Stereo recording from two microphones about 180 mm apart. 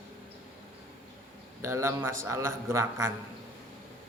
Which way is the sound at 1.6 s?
15° right (ahead or behind).